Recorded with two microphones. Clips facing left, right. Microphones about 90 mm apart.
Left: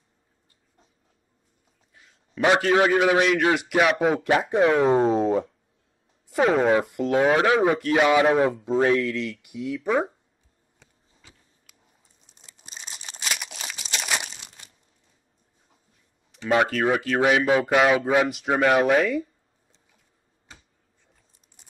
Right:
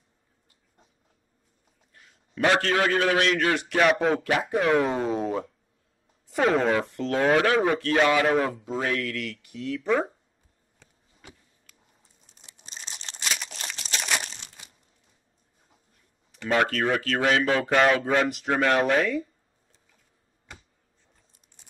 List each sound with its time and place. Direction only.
1.9 s a sound: 5° left (ahead or behind)
2.4 s speech: 15° left (ahead or behind)
4.2 s speech: 20° left (ahead or behind)
6.3 s speech: 5° left (ahead or behind)
6.7 s speech: 15° left (ahead or behind)
11.7 s a sound: 5° left (ahead or behind)
12.5 s crumpling: 5° left (ahead or behind)
16.4 s speech: 10° left (ahead or behind)